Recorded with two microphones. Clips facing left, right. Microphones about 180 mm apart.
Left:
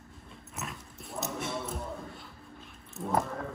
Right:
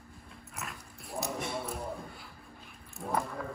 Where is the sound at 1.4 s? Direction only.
Centre (ahead or behind).